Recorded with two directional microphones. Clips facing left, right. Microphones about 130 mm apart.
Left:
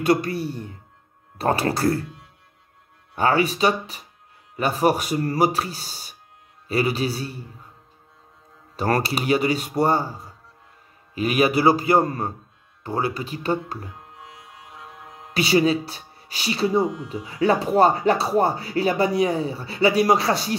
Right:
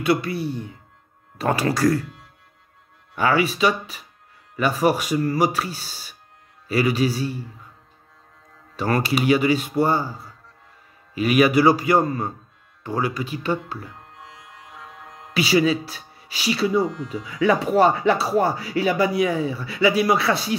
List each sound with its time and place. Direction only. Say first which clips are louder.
0.0 s speech: left 1 dB; 40° left (ahead or behind)
3.2 s speech: even; 35° left (ahead or behind)
8.7 s speech: right 1 dB; 40° left (ahead or behind)
13.9 s music: even; 10° left (ahead or behind)
15.3 s speech: even; 40° left (ahead or behind)